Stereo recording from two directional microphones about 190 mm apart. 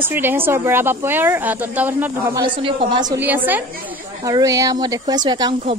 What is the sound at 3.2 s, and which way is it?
A woman's voice, 10° right (ahead or behind).